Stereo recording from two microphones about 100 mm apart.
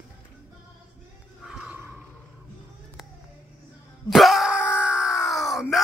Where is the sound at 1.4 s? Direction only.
15° right (ahead or behind).